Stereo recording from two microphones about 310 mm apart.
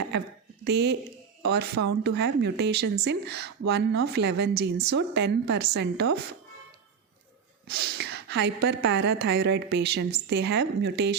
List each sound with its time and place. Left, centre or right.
0.6 s a woman's voice: right
7.7 s a woman's voice: right